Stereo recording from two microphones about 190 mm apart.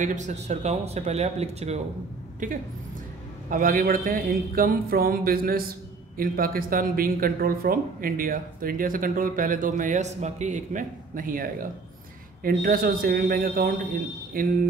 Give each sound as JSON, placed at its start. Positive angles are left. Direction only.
{"t": 0.0, "sound": "speech", "side_deg": -40}